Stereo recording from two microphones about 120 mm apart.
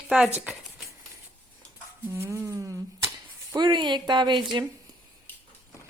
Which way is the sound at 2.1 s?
20° right (ahead or behind).